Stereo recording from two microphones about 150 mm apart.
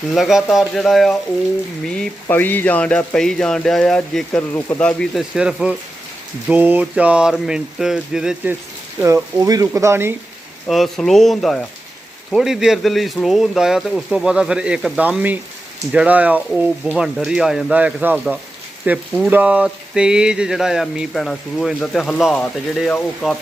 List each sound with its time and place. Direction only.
0.1 s speech: centre (ahead or behind)
2.2 s speech: 15° left (ahead or behind)
5.3 s speech: 5° right (ahead or behind)
9.0 s speech: 20° right (ahead or behind)
10.7 s speech: centre (ahead or behind)